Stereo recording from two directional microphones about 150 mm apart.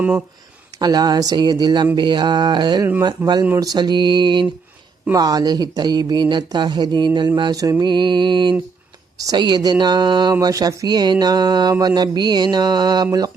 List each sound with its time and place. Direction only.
0.8 s speech: 25° right (ahead or behind)
3.6 s mantra: 25° right (ahead or behind)
5.1 s speech: 25° right (ahead or behind)